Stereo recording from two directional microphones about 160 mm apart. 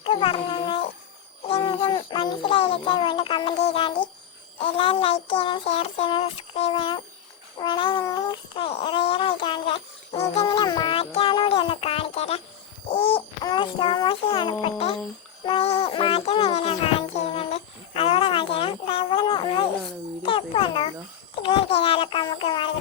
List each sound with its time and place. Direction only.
0.0 s a sound: 35° left (ahead or behind)
1.5 s speech: 35° left (ahead or behind)
4.5 s child singing: 35° left (ahead or behind)
7.6 s a sound: 30° left (ahead or behind)
10.4 s music: 25° left (ahead or behind)
12.9 s a sound: 35° left (ahead or behind)
13.4 s child singing: 30° left (ahead or behind)
15.4 s music: 35° left (ahead or behind)
20.2 s a child's voice: 35° left (ahead or behind)
21.3 s child singing: 35° left (ahead or behind)